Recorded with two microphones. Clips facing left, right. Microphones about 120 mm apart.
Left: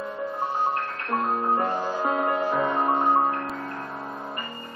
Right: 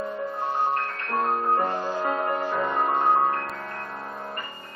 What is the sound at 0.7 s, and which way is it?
Music, 10° left (ahead or behind).